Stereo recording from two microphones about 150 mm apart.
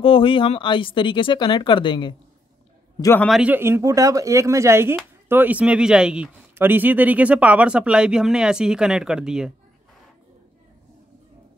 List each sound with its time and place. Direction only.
0.0 s speech: 35° left (ahead or behind)
3.2 s a man's voice: centre (ahead or behind)
3.5 s speech: 15° right (ahead or behind)